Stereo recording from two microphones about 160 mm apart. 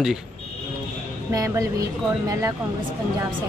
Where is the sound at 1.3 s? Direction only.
20° right (ahead or behind).